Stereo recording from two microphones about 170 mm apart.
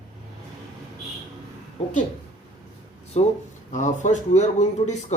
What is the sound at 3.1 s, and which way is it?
Speech, 40° left (ahead or behind).